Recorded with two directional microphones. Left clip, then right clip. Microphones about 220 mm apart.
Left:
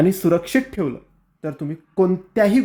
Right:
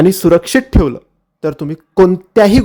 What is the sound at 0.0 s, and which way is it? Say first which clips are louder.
Speech: right 8 dB; 40° right (ahead or behind).